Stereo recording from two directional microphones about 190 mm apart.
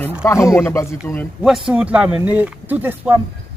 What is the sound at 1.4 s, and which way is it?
Speech, centre (ahead or behind).